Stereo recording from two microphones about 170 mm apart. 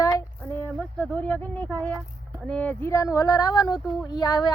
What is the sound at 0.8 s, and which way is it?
Speech, 5° left (ahead or behind).